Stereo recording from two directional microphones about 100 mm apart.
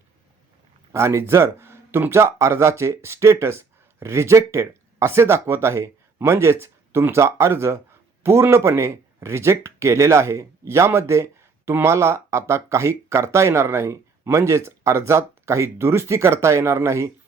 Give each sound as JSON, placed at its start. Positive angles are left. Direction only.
{"t": 0.9, "sound": "speech", "side_deg": -30}